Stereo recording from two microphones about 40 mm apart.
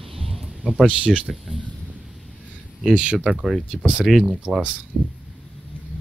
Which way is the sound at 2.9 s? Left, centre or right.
Right.